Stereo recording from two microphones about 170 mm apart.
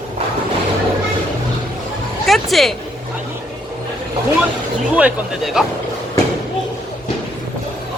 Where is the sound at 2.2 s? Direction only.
Centre (ahead or behind).